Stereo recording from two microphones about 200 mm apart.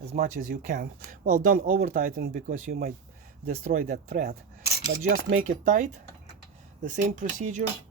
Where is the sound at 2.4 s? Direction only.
35° right (ahead or behind).